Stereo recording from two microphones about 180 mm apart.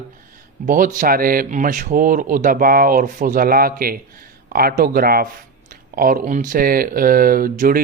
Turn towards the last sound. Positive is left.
turn(degrees=-55)  # may be behind; listen again after turning